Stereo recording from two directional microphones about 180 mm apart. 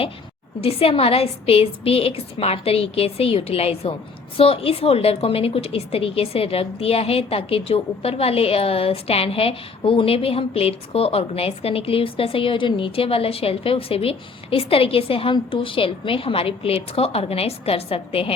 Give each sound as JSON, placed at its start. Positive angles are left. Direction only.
{"t": 0.6, "sound": "a woman's voice", "side_deg": 35}